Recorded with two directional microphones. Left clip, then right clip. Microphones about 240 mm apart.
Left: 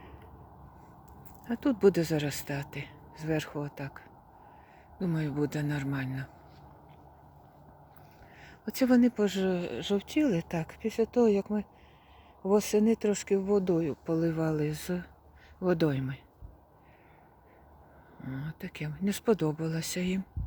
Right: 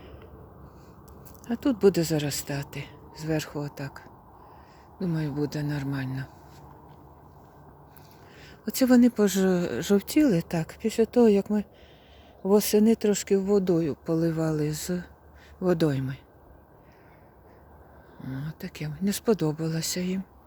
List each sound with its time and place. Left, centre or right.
1.5 s speech: centre
8.4 s speech: centre; by 10.0 s right
10.2 s speech: centre
18.2 s speech: centre